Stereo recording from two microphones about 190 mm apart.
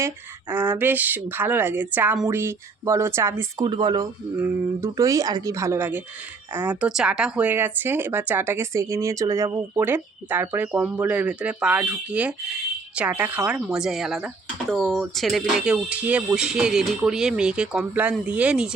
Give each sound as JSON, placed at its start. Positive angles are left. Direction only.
{"t": 0.5, "sound": "speech", "side_deg": -10}